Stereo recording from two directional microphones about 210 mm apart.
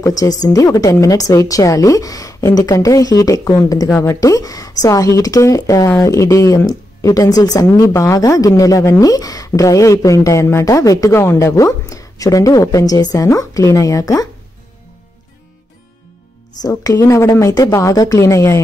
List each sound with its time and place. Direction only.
0.0 s a woman's voice: 15° left (ahead or behind)
16.6 s a woman's voice: 15° left (ahead or behind)